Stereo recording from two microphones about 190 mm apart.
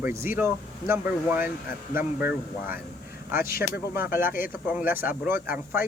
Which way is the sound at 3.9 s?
10° right (ahead or behind).